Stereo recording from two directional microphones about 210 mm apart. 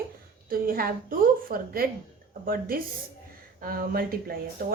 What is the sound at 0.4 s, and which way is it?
A woman's voice, 45° right (ahead or behind).